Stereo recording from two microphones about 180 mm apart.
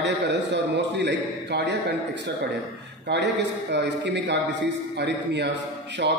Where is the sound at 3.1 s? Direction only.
75° right (ahead or behind).